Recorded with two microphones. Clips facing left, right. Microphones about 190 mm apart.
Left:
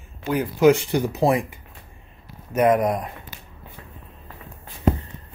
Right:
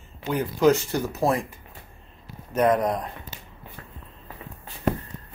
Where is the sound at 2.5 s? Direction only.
10° left (ahead or behind).